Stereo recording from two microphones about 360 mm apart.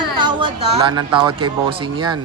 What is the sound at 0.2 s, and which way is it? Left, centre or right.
A woman's voice, centre.